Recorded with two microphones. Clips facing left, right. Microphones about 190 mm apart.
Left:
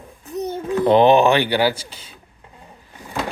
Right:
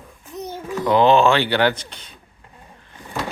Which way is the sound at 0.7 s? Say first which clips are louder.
Left 2 dB; 20° left (ahead or behind).